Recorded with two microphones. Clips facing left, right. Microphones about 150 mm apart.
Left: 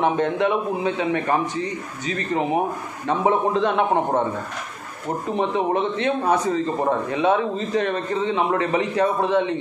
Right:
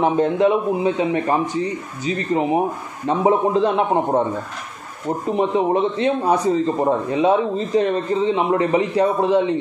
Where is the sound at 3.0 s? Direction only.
35° right (ahead or behind).